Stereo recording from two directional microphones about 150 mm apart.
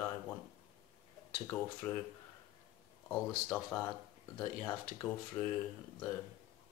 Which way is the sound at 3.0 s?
10° left (ahead or behind).